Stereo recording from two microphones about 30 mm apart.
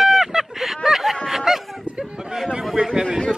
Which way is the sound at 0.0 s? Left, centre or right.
Centre.